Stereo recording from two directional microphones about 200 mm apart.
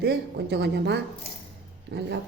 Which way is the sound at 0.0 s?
55° right (ahead or behind).